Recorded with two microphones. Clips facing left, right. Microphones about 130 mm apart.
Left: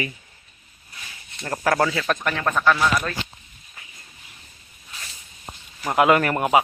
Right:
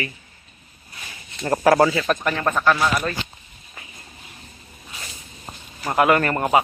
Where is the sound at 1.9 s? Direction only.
5° right (ahead or behind).